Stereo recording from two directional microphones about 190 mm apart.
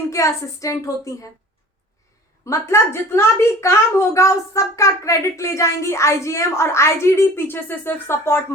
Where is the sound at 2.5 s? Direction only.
15° left (ahead or behind).